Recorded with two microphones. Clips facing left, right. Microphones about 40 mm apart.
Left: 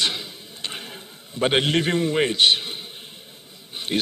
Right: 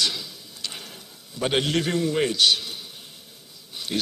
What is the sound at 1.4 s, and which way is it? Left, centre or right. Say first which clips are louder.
A man's voice: left 3 dB; left.